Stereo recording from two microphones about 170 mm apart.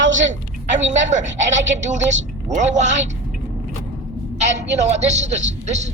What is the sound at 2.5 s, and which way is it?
Speech, 45° right (ahead or behind).